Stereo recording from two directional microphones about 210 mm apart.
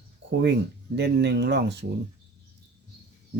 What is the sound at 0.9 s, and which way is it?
Speech, 55° right (ahead or behind).